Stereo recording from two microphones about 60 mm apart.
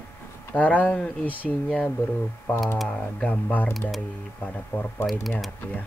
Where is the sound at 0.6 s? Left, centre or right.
Left.